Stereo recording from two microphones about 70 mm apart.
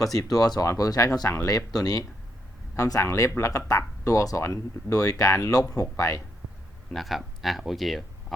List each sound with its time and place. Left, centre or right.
0.0 s speech: left
0.6 s speech: left
2.7 s speech: left
6.9 s speech: centre